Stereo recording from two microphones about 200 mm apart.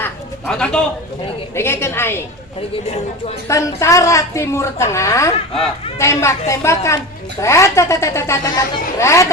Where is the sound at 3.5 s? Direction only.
15° left (ahead or behind).